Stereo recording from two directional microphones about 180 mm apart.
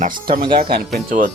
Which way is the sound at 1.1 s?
45° right (ahead or behind).